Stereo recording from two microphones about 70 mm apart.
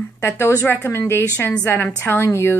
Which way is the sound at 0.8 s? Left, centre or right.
Left.